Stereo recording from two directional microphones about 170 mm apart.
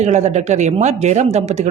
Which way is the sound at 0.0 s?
40° right (ahead or behind).